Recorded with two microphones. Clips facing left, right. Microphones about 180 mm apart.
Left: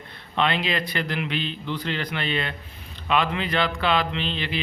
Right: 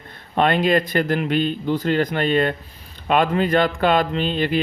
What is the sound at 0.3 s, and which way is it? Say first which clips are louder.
Speech: right 7 dB; 45° right (ahead or behind).